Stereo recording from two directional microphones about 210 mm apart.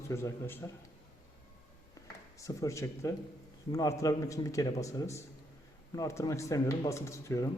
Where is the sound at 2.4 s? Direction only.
15° left (ahead or behind).